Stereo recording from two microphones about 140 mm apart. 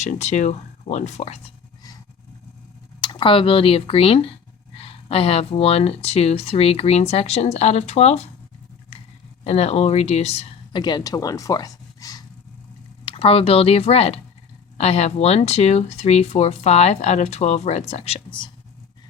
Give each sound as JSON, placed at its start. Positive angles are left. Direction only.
{"t": 0.0, "sound": "speech", "side_deg": 55}
{"t": 3.0, "sound": "speech", "side_deg": 35}
{"t": 9.4, "sound": "speech", "side_deg": 50}
{"t": 10.7, "sound": "speech", "side_deg": 30}
{"t": 13.1, "sound": "speech", "side_deg": 45}